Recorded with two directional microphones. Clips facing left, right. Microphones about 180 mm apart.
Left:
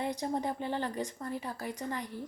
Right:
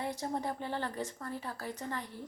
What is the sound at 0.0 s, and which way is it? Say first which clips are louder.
A woman's voice: left 3 dB; 20° left (ahead or behind).